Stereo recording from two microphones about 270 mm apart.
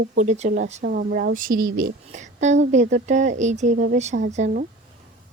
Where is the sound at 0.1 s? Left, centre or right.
Right.